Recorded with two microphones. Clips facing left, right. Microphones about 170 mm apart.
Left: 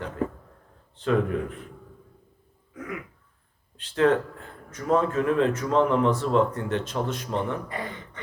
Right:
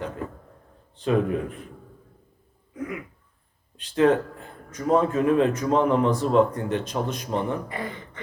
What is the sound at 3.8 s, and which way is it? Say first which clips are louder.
A man's voice: right 2 dB; 15° right (ahead or behind).